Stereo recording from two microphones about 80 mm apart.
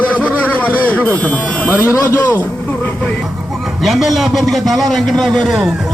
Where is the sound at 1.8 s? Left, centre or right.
Left.